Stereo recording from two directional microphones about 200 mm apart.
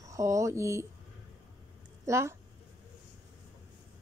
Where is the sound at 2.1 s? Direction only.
15° right (ahead or behind).